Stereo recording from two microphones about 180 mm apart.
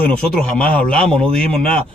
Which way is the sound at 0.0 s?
5° left (ahead or behind).